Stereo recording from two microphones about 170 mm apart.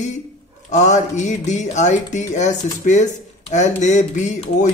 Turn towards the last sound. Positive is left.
turn(degrees=45)  # may be behind; listen again after turning